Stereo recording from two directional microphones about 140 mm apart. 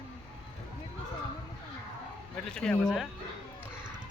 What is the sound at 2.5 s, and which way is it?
Speech, 5° left (ahead or behind).